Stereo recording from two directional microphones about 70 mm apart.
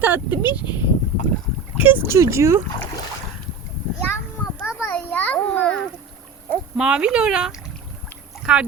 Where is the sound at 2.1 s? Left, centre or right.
Right.